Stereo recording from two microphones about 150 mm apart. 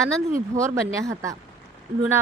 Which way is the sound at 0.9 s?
20° right (ahead or behind).